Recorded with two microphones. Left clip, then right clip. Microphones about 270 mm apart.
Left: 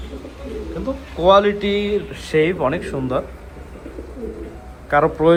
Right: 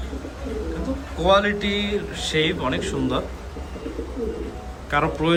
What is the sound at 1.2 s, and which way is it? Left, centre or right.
Speech, centre.